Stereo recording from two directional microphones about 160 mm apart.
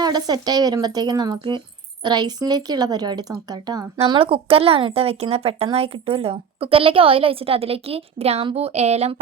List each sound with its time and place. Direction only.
0.0 s speech: 25° right (ahead or behind)
3.9 s speech: 35° right (ahead or behind)